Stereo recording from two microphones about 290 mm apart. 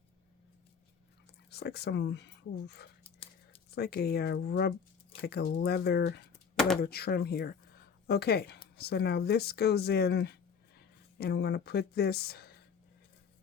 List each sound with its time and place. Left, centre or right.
1.5 s speech: left